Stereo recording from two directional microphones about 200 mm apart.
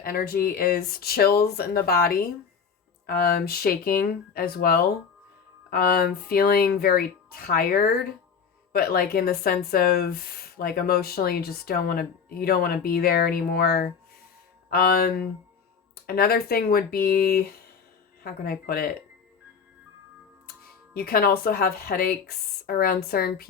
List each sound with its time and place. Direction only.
0.0 s speech: 50° left (ahead or behind)
20.9 s speech: 50° left (ahead or behind)